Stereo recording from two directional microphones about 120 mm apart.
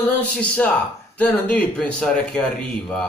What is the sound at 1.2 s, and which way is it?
Speech, 10° left (ahead or behind).